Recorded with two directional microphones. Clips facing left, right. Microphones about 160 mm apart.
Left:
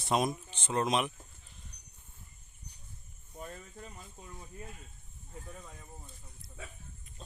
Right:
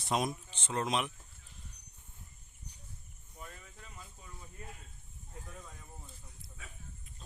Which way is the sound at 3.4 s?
35° left (ahead or behind).